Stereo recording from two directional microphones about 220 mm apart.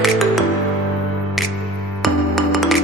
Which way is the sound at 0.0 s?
Centre (ahead or behind).